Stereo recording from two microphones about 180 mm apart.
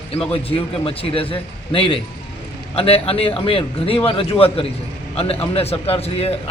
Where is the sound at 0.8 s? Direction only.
30° left (ahead or behind).